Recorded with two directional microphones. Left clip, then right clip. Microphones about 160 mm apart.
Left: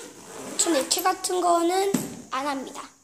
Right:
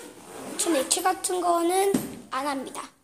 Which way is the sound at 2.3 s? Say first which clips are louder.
Left 1 dB; centre (ahead or behind).